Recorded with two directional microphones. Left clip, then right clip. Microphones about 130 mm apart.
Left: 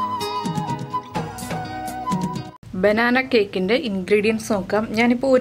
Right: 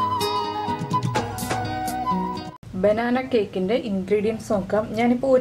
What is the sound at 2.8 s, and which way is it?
A woman's voice, 35° left (ahead or behind).